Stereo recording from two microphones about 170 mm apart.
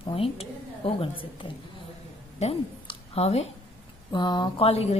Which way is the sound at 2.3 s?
35° left (ahead or behind).